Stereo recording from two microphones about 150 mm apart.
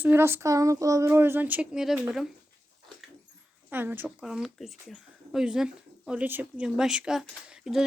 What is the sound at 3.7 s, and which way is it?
Speech, 10° right (ahead or behind).